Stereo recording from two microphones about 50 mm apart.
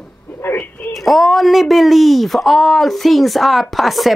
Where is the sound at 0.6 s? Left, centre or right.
Left.